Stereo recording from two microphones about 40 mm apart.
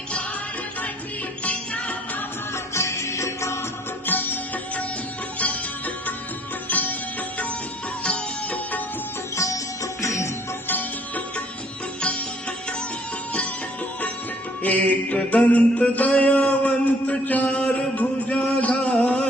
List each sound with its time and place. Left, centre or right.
1.5 s music: left
4.0 s music: left
5.4 s music: left
8.0 s sitar: left
10.7 s music: left
14.6 s mantra: left
18.6 s a sound: left